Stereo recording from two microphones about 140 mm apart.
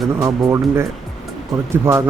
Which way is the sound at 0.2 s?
20° right (ahead or behind).